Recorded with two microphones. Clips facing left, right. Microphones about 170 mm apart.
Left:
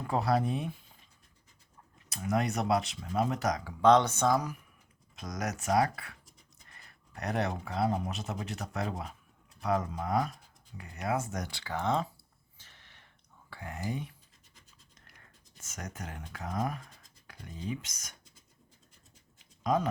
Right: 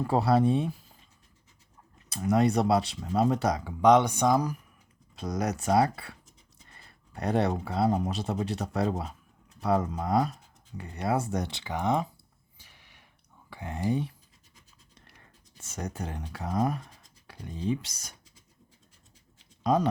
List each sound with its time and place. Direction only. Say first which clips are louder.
0.1 s speech: right 5 dB; 30° right (ahead or behind)
2.0 s speech: right 7 dB; 30° right (ahead or behind); by 4.4 s 15° right (ahead or behind)
5.1 s speech: right 6 dB; 30° right (ahead or behind)
12.5 s a sound: right 2 dB; 10° right (ahead or behind)
13.5 s speech: right 8 dB; 25° right (ahead or behind)
14.9 s scratch: right 5 dB; 30° right (ahead or behind)
15.6 s speech: right 7 dB; 30° right (ahead or behind)
19.4 s pigeon: right 4 dB; 30° right (ahead or behind)